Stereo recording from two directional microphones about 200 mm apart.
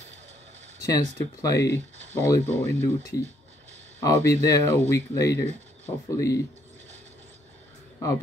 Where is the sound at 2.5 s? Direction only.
35° right (ahead or behind).